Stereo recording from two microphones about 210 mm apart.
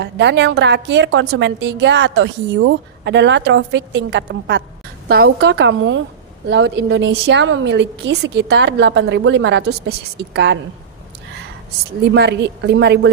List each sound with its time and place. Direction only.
0.0 s a woman's voice: 55° right (ahead or behind)
12.1 s a woman's voice: 55° right (ahead or behind)